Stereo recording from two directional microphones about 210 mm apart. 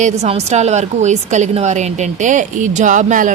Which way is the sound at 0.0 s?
30° right (ahead or behind).